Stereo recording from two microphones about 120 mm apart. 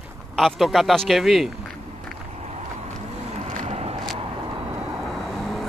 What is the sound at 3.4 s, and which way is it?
Vehicle, 70° right (ahead or behind).